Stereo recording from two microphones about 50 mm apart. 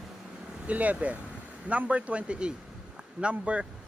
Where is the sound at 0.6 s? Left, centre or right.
Right.